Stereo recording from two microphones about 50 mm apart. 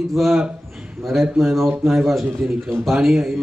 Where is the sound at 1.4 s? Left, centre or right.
Centre.